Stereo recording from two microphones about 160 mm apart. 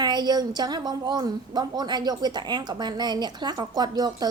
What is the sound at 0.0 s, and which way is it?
A woman's voice, 25° right (ahead or behind).